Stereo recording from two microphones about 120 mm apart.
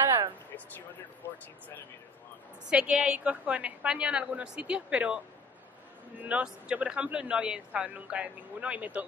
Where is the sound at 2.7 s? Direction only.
10° right (ahead or behind).